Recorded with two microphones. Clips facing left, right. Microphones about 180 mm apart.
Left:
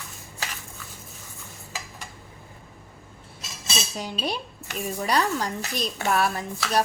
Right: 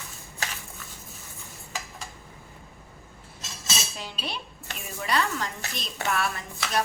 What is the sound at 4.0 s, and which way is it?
A woman's voice, 40° left (ahead or behind).